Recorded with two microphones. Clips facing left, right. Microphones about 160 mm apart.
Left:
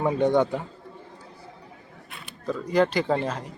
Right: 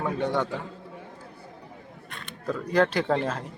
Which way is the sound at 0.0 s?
15° left (ahead or behind).